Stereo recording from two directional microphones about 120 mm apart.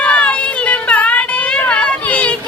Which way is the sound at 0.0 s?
10° left (ahead or behind).